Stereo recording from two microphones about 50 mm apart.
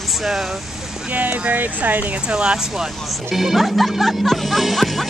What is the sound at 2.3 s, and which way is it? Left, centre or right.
Speech, centre.